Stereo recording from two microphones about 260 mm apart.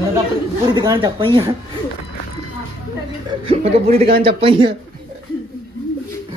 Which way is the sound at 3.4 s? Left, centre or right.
Right.